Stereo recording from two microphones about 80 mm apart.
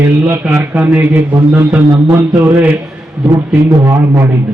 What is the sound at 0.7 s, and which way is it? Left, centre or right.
Speech, right.